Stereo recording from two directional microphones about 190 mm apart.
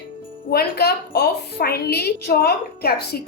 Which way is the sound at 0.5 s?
55° left (ahead or behind).